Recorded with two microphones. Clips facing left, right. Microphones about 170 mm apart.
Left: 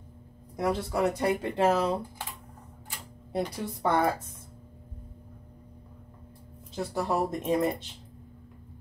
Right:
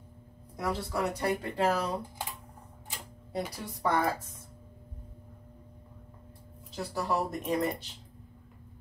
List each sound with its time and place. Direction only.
0.6 s speech: 20° left (ahead or behind)
3.3 s speech: 25° left (ahead or behind)
6.7 s speech: 20° left (ahead or behind)